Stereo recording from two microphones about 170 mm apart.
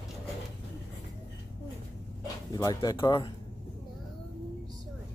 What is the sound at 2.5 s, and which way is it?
Speech, 20° left (ahead or behind).